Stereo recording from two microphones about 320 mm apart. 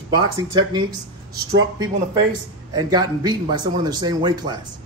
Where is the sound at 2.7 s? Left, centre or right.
Centre.